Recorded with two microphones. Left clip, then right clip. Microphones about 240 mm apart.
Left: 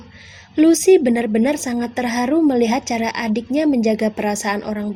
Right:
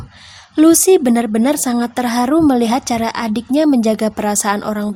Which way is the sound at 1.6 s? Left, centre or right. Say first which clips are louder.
Right 5 dB; right.